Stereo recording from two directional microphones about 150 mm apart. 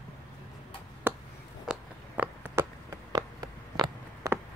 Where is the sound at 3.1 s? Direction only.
25° right (ahead or behind).